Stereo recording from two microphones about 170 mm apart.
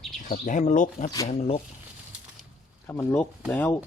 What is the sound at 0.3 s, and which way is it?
Speech, 50° left (ahead or behind).